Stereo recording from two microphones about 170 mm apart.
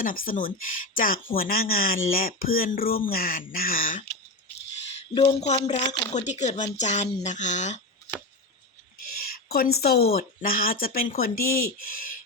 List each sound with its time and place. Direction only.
0.0 s speech: 50° left (ahead or behind)
4.7 s a sound: 40° left (ahead or behind)
5.6 s speech: 40° left (ahead or behind)
9.2 s a woman's voice: 65° left (ahead or behind)